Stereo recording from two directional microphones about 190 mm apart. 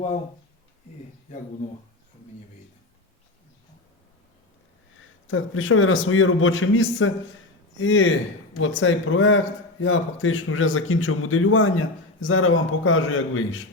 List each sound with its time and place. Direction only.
4.9 s a man's voice: 90° left